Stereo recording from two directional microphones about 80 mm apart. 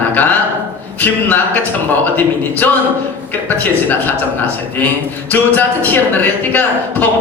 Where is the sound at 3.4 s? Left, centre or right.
Left.